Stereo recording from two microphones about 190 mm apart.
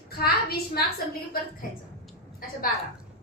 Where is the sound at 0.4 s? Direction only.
55° left (ahead or behind).